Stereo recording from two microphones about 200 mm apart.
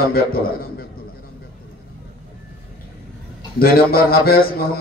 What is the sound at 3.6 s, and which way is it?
A man's voice, 50° left (ahead or behind).